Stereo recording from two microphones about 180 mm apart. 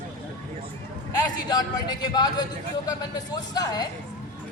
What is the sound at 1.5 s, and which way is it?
Speech, 25° left (ahead or behind).